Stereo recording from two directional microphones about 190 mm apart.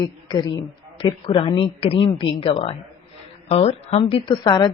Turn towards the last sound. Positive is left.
turn(degrees=20)  # may be behind; listen again after turning